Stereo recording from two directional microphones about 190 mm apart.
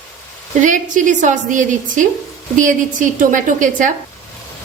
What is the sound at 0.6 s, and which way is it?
A woman's voice, 45° right (ahead or behind).